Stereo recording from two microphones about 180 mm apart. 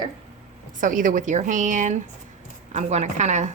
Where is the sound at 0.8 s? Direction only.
45° right (ahead or behind).